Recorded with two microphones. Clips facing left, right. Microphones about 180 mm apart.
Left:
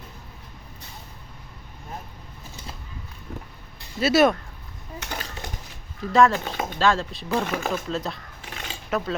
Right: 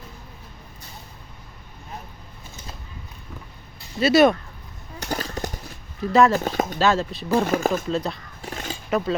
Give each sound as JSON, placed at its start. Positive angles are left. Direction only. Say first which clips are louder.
{"t": 4.0, "sound": "speech", "louder": "right 3 dB", "side_deg": 0}
{"t": 4.9, "sound": "jackhammer", "louder": "right 7 dB", "side_deg": -40}
{"t": 6.1, "sound": "speech", "louder": "right 1 dB", "side_deg": -5}
{"t": 6.3, "sound": "speech", "louder": "right 5 dB", "side_deg": -45}
{"t": 6.7, "sound": "speech", "louder": "left 1 dB", "side_deg": -5}
{"t": 7.4, "sound": "speech", "louder": "right 5 dB", "side_deg": -40}
{"t": 7.9, "sound": "speech", "louder": "right 4 dB", "side_deg": 0}
{"t": 8.4, "sound": "a sound", "louder": "right 5 dB", "side_deg": -40}
{"t": 8.9, "sound": "speech", "louder": "right 3 dB", "side_deg": 0}